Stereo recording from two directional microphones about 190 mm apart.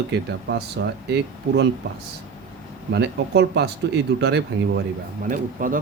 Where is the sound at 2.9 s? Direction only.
60° right (ahead or behind).